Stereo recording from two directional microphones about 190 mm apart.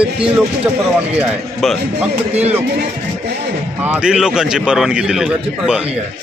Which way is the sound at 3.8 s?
5° right (ahead or behind).